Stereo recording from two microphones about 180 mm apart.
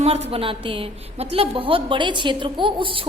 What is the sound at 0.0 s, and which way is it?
A woman's voice, 35° right (ahead or behind).